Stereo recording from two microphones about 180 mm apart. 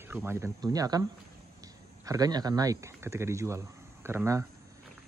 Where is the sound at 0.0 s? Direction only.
10° right (ahead or behind).